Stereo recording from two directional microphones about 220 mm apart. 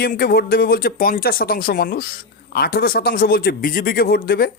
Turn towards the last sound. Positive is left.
turn(degrees=45)  # may be behind; listen again after turning